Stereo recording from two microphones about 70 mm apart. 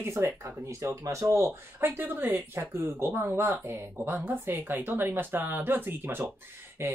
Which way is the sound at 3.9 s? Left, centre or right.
Right.